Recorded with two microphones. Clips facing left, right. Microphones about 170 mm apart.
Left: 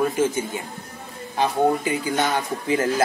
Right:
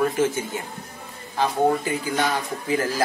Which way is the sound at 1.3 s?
15° left (ahead or behind).